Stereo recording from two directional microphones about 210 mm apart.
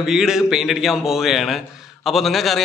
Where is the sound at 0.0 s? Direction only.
Centre (ahead or behind).